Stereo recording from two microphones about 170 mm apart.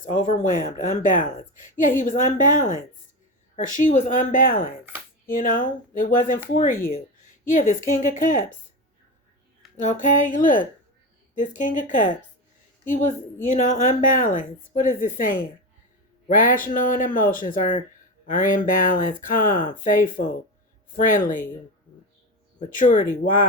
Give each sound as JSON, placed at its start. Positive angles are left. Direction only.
{"t": 0.0, "sound": "a woman's voice", "side_deg": 50}
{"t": 7.5, "sound": "a woman's voice", "side_deg": 50}
{"t": 9.7, "sound": "a woman's voice", "side_deg": 50}
{"t": 22.7, "sound": "a woman's voice", "side_deg": 50}